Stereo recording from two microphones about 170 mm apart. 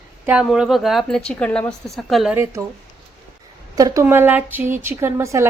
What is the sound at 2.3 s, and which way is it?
Speech, 20° right (ahead or behind).